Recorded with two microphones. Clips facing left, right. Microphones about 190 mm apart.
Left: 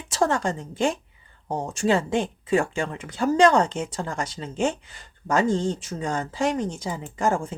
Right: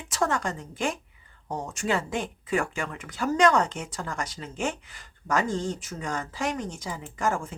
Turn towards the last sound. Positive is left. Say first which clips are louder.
# left 4 dB
turn(degrees=30)  # may be behind; listen again after turning